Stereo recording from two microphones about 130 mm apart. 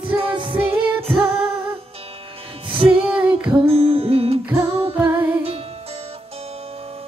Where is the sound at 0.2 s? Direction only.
40° right (ahead or behind).